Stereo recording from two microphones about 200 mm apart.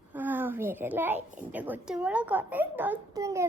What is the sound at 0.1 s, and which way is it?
A child's voice, 10° right (ahead or behind).